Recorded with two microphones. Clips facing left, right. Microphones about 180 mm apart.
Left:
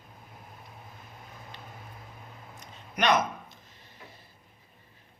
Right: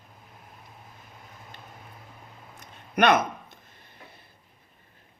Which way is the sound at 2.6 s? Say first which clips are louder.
Right 7 dB; 55° right (ahead or behind).